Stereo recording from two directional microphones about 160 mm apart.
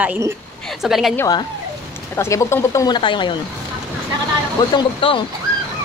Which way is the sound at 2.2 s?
20° left (ahead or behind).